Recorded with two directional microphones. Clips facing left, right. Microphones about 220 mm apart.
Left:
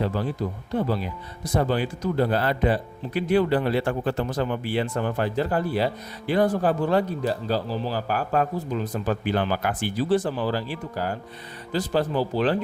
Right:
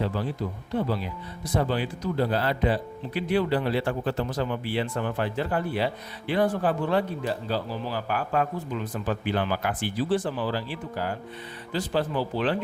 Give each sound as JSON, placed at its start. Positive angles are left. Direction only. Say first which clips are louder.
{"t": 0.0, "sound": "speech", "louder": "left 2 dB", "side_deg": 45}
{"t": 1.5, "sound": "speech", "louder": "left 3 dB", "side_deg": 45}